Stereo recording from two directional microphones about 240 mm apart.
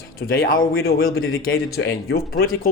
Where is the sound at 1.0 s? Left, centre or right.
Left.